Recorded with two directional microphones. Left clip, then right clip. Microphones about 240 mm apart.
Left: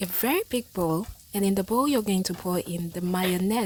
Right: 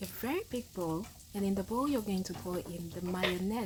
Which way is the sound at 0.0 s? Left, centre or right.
Left.